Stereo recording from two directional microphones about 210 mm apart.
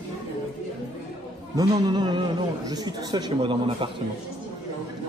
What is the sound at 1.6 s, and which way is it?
A man's voice, 20° right (ahead or behind).